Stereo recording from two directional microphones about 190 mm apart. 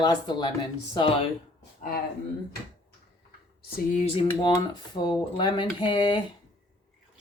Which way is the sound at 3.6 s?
50° left (ahead or behind).